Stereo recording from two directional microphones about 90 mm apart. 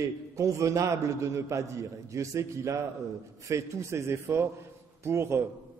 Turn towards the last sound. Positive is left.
turn(degrees=-30)  # may be behind; listen again after turning